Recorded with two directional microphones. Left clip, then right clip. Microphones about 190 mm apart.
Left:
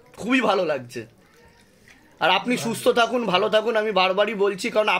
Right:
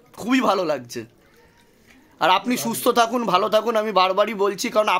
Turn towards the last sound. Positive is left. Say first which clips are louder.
# right 1 dB
turn(degrees=-30)  # may be behind; listen again after turning